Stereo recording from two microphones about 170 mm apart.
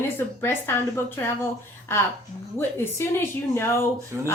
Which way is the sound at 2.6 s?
15° left (ahead or behind).